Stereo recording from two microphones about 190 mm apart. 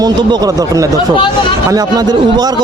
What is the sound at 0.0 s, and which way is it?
A man's voice, 20° right (ahead or behind).